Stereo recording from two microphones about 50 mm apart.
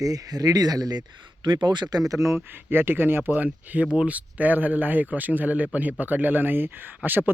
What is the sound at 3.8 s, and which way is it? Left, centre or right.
A man's voice, right.